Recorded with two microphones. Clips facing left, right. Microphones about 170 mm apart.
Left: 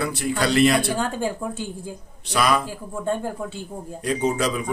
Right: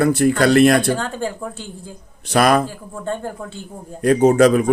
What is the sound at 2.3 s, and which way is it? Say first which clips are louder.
Speech: right 6 dB; 50° right (ahead or behind).